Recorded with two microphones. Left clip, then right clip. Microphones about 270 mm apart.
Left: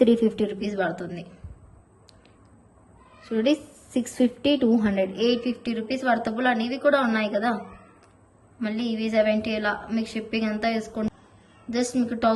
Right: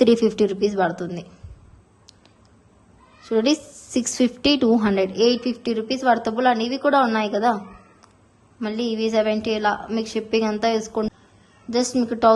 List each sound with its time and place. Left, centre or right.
0.0 s a woman's voice: right
3.2 s a woman's voice: centre
8.6 s a woman's voice: centre